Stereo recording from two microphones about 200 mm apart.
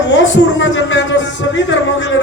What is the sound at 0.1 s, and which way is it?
A man's voice, 65° left (ahead or behind).